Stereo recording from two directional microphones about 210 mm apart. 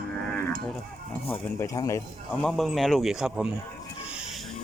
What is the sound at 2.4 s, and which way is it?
A man's voice, centre (ahead or behind).